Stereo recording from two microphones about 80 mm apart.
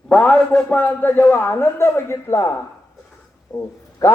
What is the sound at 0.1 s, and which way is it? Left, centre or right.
A man's voice, centre.